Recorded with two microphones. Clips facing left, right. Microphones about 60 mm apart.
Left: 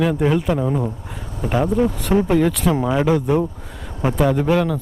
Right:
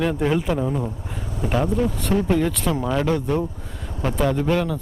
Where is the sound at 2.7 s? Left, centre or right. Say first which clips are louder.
Left 3 dB; centre.